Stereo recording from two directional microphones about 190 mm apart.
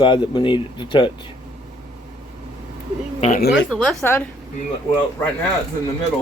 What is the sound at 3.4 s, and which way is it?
Speech, 60° left (ahead or behind).